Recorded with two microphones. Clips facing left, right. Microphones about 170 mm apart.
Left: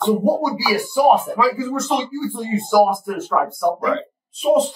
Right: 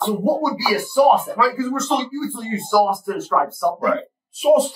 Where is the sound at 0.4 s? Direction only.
10° left (ahead or behind).